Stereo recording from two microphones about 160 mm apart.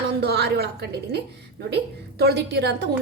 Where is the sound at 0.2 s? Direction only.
90° right.